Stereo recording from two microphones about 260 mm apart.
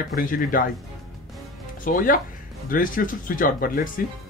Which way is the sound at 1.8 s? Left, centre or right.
Left.